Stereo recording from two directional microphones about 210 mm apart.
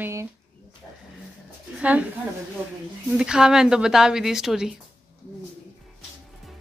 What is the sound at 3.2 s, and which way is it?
A woman's voice, 5° right (ahead or behind).